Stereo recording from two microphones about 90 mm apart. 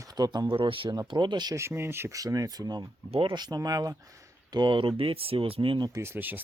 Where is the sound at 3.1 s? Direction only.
75° right (ahead or behind).